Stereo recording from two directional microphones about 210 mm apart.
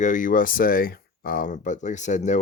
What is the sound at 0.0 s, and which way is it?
Speech, 40° left (ahead or behind).